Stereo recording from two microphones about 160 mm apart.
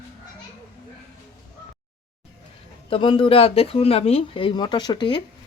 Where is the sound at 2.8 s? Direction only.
35° left (ahead or behind).